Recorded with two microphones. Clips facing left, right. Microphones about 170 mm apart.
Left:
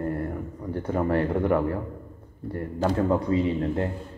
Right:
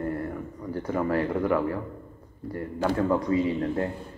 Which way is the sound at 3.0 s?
30° left (ahead or behind).